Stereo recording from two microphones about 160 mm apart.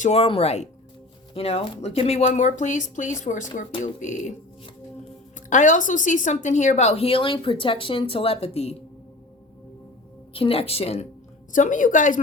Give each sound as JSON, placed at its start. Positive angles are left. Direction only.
{"t": 0.0, "sound": "speech", "side_deg": 40}
{"t": 5.5, "sound": "speech", "side_deg": 50}
{"t": 10.3, "sound": "speech", "side_deg": 35}
{"t": 11.5, "sound": "speech", "side_deg": 55}